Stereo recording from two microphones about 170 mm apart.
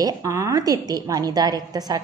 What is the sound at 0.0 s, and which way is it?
A woman's voice, 20° right (ahead or behind).